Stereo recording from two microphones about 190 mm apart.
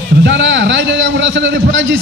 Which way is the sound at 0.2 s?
75° right (ahead or behind).